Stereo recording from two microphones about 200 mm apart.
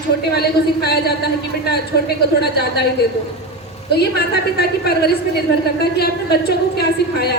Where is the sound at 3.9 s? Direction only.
55° left (ahead or behind).